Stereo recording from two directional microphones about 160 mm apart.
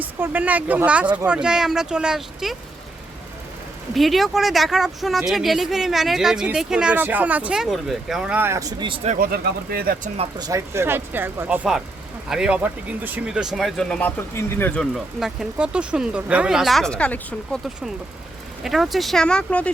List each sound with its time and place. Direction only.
0.0 s speech: 10° right (ahead or behind)
3.9 s speech: centre (ahead or behind); by 9.0 s 25° right (ahead or behind)
9.0 s speech: 65° right (ahead or behind)
10.2 s speech: 25° right (ahead or behind); by 14.8 s 15° left (ahead or behind)
14.9 s speech: centre (ahead or behind)